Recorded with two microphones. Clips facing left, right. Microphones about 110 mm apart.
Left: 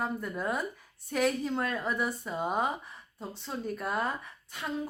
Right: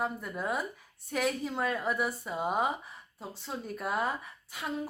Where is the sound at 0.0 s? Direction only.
5° right (ahead or behind).